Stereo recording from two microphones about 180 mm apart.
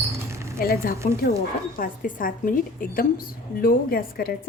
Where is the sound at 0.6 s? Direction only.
55° left (ahead or behind).